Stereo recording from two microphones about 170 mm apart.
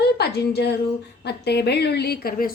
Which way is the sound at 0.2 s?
75° left (ahead or behind).